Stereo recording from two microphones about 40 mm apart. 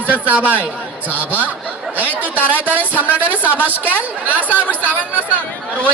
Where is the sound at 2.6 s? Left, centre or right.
Right.